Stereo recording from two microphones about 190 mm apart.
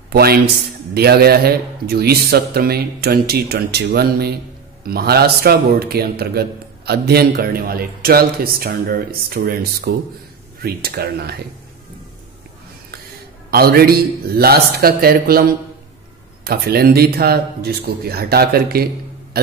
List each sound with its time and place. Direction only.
0.1 s a man's voice: 55° right (ahead or behind)
13.5 s speech: 55° right (ahead or behind)
16.4 s speech: 55° right (ahead or behind)
19.3 s a sound: 55° right (ahead or behind)